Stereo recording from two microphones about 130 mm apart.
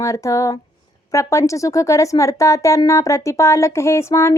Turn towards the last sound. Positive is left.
turn(degrees=20)  # may be behind; listen again after turning